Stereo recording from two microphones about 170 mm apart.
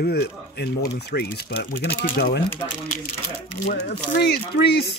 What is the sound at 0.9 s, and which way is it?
Speech, 80° left.